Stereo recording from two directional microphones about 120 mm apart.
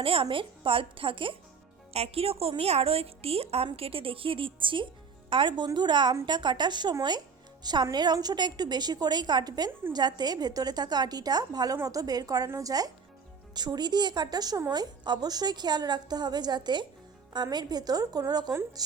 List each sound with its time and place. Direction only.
0.0 s a woman's voice: 50° right (ahead or behind)